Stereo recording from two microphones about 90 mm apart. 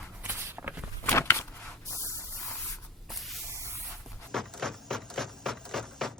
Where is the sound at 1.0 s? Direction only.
30° left (ahead or behind).